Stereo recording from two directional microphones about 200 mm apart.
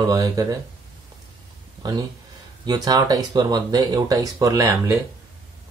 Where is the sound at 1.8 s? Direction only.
20° right (ahead or behind).